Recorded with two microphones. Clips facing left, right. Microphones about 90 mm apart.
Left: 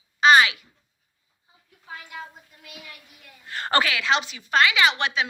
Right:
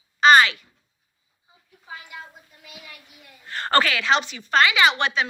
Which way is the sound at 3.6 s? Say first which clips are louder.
Right 2 dB; 10° left (ahead or behind).